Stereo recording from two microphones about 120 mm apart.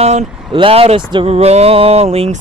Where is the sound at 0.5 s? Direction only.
50° right (ahead or behind).